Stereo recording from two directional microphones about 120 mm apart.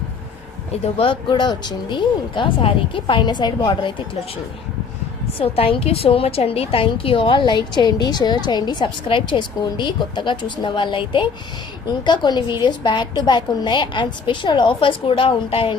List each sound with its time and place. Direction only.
0.7 s a woman's voice: 50° left (ahead or behind)
5.4 s a woman's voice: 50° left (ahead or behind)